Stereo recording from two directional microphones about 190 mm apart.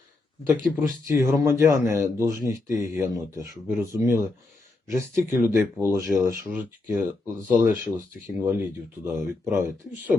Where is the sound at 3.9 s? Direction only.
15° right (ahead or behind).